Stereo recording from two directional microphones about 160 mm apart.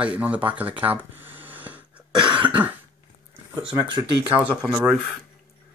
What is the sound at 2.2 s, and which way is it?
Cough, 30° right (ahead or behind).